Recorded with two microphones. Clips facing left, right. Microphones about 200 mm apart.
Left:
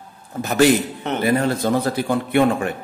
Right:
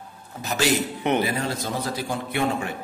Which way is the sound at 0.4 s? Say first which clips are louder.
Left 8 dB; 50° left (ahead or behind).